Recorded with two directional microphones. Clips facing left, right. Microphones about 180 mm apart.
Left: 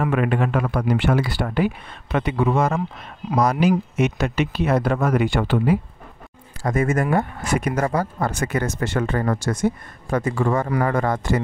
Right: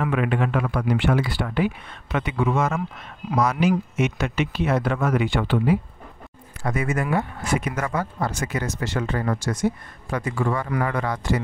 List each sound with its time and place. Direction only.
0.0 s speech: 45° left (ahead or behind)
8.2 s speech: 55° left (ahead or behind)